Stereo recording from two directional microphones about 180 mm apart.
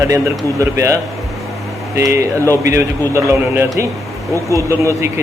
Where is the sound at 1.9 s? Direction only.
15° right (ahead or behind).